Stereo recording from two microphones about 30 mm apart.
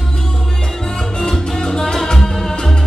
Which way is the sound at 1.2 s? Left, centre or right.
Centre.